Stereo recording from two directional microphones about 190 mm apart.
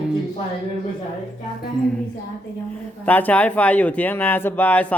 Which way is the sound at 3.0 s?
10° left (ahead or behind).